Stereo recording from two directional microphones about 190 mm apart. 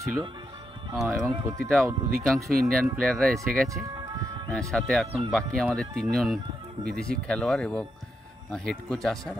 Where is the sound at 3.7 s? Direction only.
20° right (ahead or behind).